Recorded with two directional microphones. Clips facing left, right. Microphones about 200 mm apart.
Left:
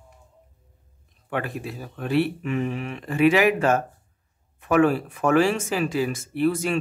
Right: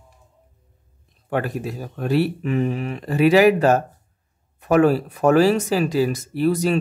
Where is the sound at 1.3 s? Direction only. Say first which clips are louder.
Right 5 dB; 40° right (ahead or behind).